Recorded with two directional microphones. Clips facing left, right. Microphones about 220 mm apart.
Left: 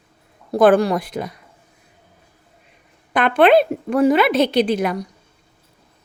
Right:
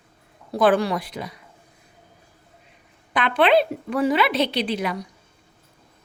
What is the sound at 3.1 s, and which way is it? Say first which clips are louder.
A woman's voice: left 5 dB; 50° left (ahead or behind).